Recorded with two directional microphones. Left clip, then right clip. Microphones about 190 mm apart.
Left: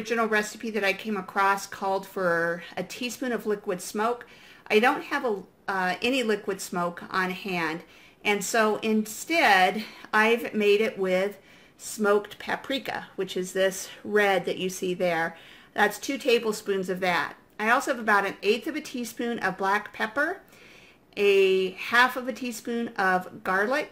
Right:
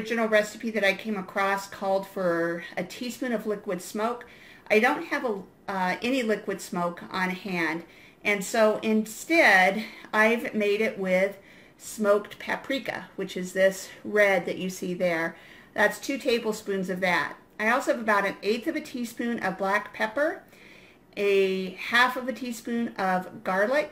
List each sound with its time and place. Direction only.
0.0 s speech: 45° left (ahead or behind)